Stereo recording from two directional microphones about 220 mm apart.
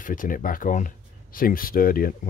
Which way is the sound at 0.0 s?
40° left (ahead or behind).